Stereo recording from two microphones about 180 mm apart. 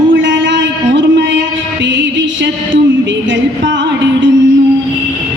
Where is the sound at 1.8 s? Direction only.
85° right.